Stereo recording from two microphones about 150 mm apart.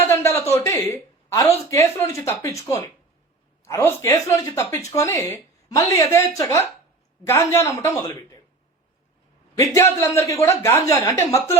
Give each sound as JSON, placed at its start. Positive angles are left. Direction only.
{"t": 0.1, "sound": "speech", "side_deg": 15}
{"t": 9.7, "sound": "speech", "side_deg": 20}